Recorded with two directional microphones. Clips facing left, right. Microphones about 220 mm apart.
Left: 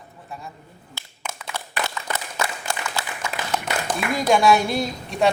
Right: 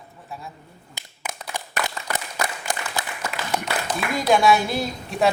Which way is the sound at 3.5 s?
10° right (ahead or behind).